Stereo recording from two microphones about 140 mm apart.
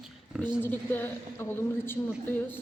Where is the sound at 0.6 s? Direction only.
15° left (ahead or behind).